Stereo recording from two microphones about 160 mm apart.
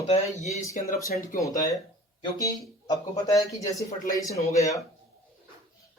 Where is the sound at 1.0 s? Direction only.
60° left (ahead or behind).